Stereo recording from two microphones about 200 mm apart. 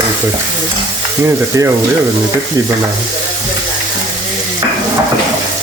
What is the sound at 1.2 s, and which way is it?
Frying, 15° right (ahead or behind).